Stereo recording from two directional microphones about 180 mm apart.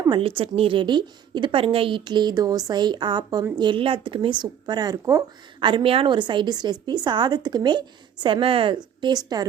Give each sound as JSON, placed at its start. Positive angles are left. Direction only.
{"t": 0.0, "sound": "speech", "side_deg": -25}